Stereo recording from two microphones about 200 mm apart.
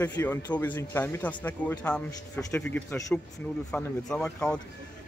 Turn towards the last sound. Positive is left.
turn(degrees=5)  # may be behind; listen again after turning